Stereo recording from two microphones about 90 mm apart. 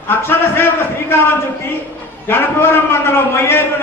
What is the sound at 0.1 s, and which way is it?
Speech, 25° left (ahead or behind).